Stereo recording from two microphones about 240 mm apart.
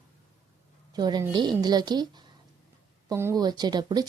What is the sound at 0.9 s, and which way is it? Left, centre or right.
Speech, centre.